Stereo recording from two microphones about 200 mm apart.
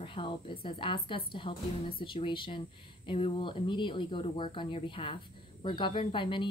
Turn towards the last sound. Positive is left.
turn(degrees=25)  # may be behind; listen again after turning